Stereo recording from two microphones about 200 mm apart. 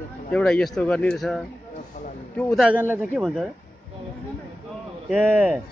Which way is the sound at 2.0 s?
40° left (ahead or behind).